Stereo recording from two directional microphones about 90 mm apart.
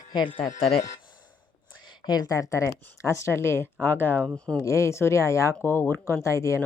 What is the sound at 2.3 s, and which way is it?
Speech, 35° left (ahead or behind).